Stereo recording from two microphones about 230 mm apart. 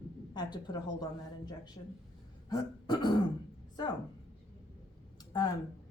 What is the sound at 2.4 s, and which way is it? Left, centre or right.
Burping, centre.